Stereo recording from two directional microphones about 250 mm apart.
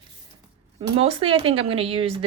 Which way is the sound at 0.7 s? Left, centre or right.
Right.